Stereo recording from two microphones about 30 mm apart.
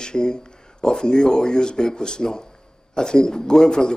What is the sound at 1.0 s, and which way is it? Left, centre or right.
Speech, left.